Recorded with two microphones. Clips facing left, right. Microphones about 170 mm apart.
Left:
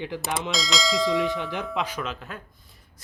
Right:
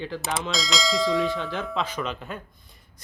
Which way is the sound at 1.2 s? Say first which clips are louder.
Even; 20° left (ahead or behind).